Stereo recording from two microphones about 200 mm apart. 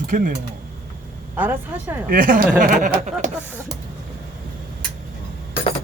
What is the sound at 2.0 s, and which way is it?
Speech, 45° right (ahead or behind).